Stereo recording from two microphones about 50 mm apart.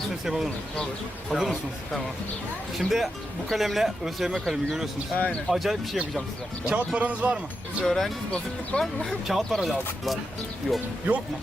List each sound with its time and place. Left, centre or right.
0.3 s speech: centre
1.3 s speech: centre
2.7 s speech: centre
5.1 s speech: left
5.5 s speech: centre
6.7 s speech: right
7.9 s speech: centre
8.7 s speech: left
9.2 s speech: centre